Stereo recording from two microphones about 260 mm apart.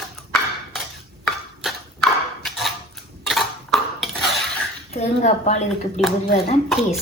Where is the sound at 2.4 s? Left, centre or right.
Centre.